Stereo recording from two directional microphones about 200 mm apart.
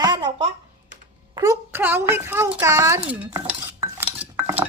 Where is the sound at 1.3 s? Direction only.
15° right (ahead or behind).